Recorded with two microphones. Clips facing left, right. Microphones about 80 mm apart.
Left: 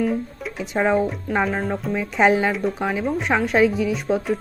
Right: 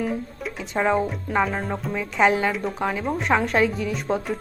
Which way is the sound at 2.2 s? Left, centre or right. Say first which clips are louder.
Left 2 dB; left.